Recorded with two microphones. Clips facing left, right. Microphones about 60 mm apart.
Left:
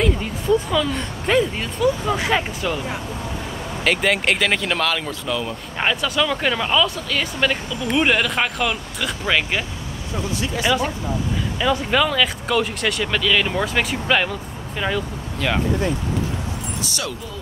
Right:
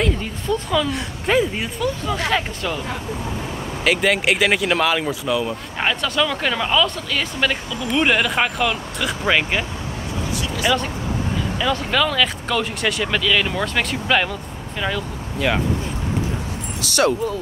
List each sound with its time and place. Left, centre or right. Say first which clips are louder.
0.0 s speech: left 1 dB; centre
1.8 s speech: left 4 dB; centre
3.8 s speech: right 1 dB; centre
10.6 s speech: even; centre
15.3 s speech: right 2 dB; centre
16.8 s speech: right 2 dB; right